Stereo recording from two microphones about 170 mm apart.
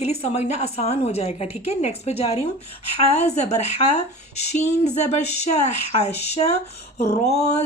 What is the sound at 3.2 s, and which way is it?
Speech, 40° left (ahead or behind).